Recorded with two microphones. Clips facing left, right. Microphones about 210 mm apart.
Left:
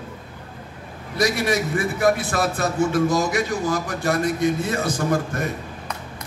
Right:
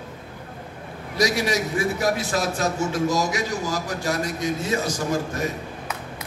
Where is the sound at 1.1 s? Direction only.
55° left (ahead or behind).